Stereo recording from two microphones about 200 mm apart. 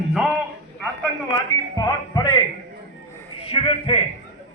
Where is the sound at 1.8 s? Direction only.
20° left (ahead or behind).